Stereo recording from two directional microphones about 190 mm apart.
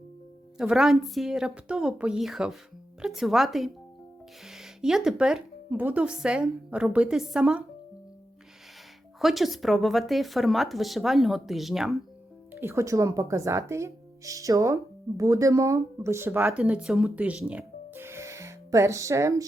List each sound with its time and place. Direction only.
0.5 s speech: 5° right (ahead or behind)
9.1 s speech: centre (ahead or behind)
12.5 s speech: 15° right (ahead or behind)